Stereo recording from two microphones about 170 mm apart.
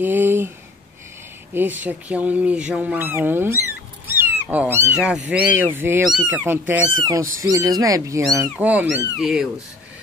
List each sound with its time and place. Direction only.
0.0 s a sound: 10° right (ahead or behind)
1.5 s speech: 10° right (ahead or behind)
7.0 s speech: 20° right (ahead or behind); by 9.5 s 5° right (ahead or behind)